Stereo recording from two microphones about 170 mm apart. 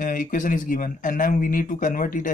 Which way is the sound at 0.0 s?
55° left (ahead or behind).